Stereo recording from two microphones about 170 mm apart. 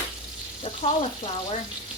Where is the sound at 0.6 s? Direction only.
35° left (ahead or behind).